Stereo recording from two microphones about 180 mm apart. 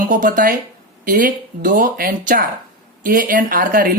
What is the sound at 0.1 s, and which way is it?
Speech, 45° right (ahead or behind).